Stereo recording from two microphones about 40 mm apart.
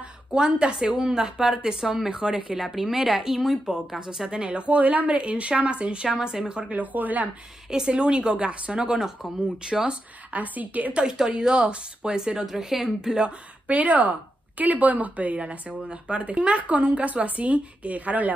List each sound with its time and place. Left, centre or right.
0.3 s speech: right
2.5 s speech: centre
4.3 s speech: right
4.6 s speech: right
6.0 s speech: centre
6.7 s speech: right
7.7 s speech: right
8.7 s speech: centre
10.3 s speech: right
10.9 s speech: right
12.4 s speech: centre
13.7 s speech: right